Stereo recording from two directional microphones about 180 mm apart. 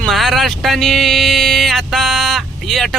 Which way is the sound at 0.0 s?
Centre (ahead or behind).